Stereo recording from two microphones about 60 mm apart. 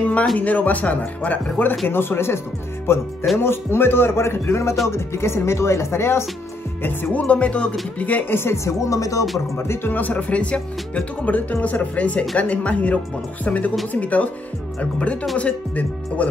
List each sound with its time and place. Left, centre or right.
0.4 s speech: left
6.8 s speech: left
7.2 s speech: left
9.6 s speech: left
9.9 s speech: left